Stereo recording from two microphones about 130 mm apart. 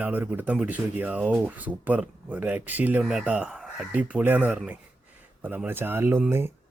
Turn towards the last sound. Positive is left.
turn(degrees=-15)  # may be behind; listen again after turning